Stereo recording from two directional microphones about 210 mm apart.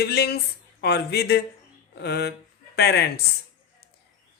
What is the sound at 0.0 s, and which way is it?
Speech, 50° left (ahead or behind).